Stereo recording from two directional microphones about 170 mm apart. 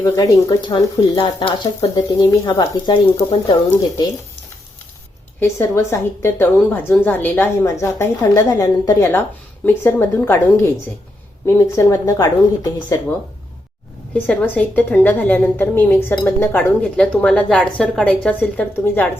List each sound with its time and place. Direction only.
0.0 s speech: 20° left (ahead or behind)
5.4 s speech: 15° left (ahead or behind)
14.1 s speech: 10° left (ahead or behind)